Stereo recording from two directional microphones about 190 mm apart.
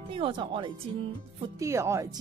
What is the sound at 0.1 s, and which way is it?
Speech, 25° right (ahead or behind).